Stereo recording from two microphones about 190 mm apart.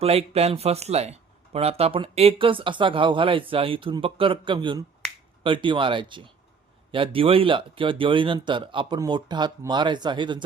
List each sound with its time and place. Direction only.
0.0 s speech: 30° right (ahead or behind)